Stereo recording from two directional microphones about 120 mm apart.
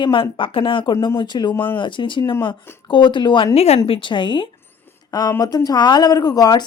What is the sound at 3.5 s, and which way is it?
Speech, 60° left (ahead or behind).